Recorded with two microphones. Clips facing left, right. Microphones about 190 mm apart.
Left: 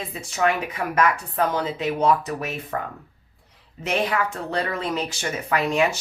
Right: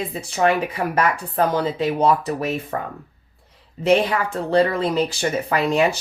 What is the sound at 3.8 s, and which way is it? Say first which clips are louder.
Speech: right 6 dB; 30° right (ahead or behind).